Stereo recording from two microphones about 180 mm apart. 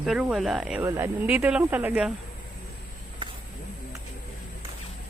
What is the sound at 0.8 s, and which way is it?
Speech, 15° right (ahead or behind).